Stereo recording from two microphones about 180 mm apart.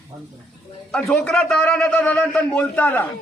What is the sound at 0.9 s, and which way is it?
A man's voice, 5° left (ahead or behind).